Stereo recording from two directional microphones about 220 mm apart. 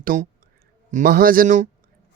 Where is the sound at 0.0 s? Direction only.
40° right (ahead or behind).